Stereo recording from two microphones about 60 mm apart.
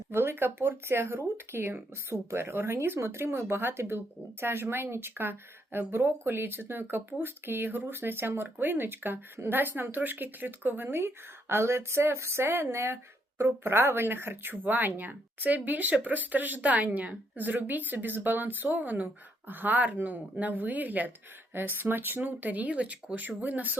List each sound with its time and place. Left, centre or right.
0.1 s speech: right